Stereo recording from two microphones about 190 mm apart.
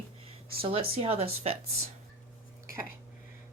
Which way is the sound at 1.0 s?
35° right (ahead or behind).